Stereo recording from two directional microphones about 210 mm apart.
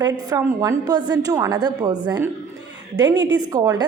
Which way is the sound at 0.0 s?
20° right (ahead or behind).